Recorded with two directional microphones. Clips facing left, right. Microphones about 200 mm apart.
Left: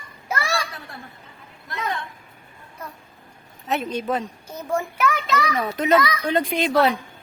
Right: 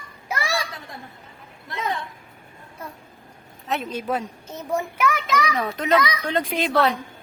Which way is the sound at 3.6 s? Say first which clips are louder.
Left 2 dB; centre (ahead or behind).